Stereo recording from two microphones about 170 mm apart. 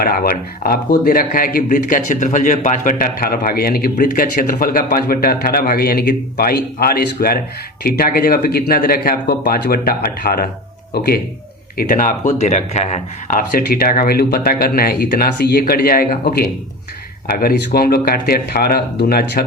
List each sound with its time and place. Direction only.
0.0 s speech: 60° left (ahead or behind)
11.8 s speech: 55° left (ahead or behind)
17.3 s speech: 60° left (ahead or behind)